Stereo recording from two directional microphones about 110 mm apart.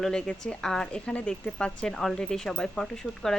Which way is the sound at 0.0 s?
5° left (ahead or behind).